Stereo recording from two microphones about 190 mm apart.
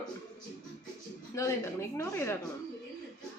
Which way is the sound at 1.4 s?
15° left (ahead or behind).